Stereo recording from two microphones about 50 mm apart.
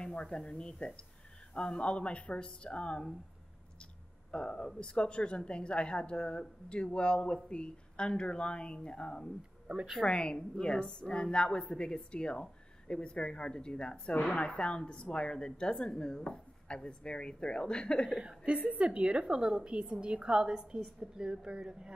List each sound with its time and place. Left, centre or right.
0.0 s a woman's voice: centre
4.3 s a woman's voice: centre
9.7 s speech: centre
10.0 s a woman's voice: centre
18.2 s a woman's voice: right